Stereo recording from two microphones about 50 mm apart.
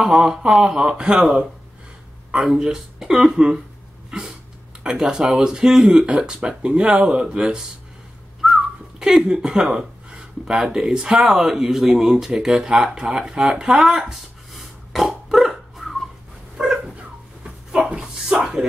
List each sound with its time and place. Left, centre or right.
0.2 s speech: centre
0.7 s speech: centre
4.8 s speech: centre
8.4 s whistling: centre
9.0 s speech: centre
15.0 s dog: centre
16.5 s dog: centre
17.4 s a sound: right